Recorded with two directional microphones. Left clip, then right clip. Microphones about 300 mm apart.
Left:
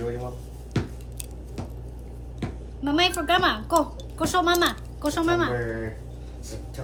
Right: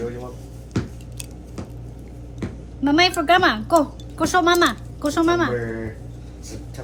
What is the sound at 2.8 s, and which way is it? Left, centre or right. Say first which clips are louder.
A woman's voice: right 6 dB; right.